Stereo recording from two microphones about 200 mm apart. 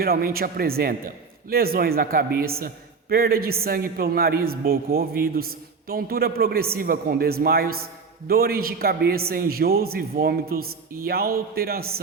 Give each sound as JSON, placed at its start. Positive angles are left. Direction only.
{"t": 0.0, "sound": "a man's voice", "side_deg": -50}